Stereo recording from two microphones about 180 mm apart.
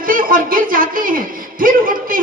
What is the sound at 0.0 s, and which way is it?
A man's voice, 50° right (ahead or behind).